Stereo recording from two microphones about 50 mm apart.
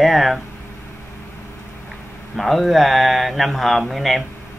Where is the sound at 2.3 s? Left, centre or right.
Centre.